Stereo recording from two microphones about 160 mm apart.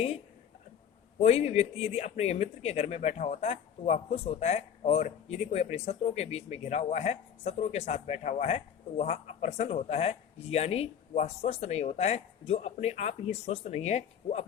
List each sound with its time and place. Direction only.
1.2 s speech: 40° left (ahead or behind)